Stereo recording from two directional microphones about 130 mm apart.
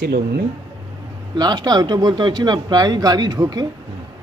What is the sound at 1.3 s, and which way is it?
Speech, 30° right (ahead or behind).